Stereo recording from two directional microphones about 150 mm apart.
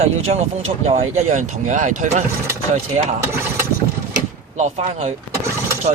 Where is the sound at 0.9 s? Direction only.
50° right (ahead or behind).